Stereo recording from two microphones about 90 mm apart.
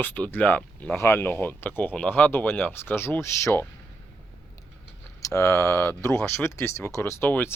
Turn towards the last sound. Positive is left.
turn(degrees=25)  # may be behind; listen again after turning